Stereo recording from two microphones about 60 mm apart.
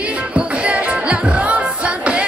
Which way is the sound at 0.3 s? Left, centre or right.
Right.